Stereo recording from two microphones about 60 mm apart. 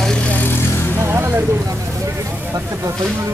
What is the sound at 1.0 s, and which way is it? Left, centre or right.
Vehicle, right.